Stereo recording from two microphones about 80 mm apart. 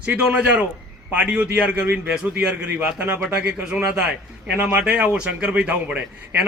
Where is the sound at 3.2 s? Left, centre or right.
Centre.